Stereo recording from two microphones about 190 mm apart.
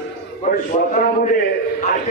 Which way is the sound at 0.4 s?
45° left (ahead or behind).